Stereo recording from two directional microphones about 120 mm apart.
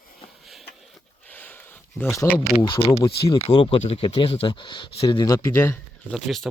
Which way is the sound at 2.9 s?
25° left (ahead or behind).